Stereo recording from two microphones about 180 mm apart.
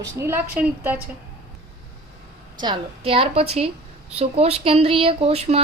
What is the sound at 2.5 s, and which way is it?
A woman's voice, 25° right (ahead or behind).